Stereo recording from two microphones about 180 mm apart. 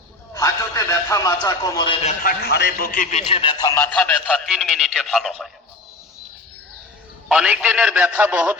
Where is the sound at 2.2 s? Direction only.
60° left (ahead or behind); by 5.5 s centre (ahead or behind).